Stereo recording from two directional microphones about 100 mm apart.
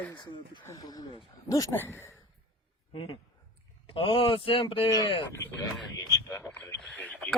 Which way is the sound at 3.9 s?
65° left (ahead or behind).